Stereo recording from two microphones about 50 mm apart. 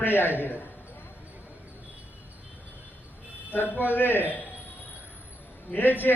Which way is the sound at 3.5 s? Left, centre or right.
Left.